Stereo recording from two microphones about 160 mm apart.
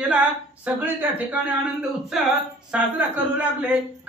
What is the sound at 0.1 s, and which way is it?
A woman's voice, 5° right (ahead or behind).